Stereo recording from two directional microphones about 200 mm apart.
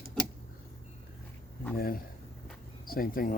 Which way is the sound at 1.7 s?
50° left (ahead or behind).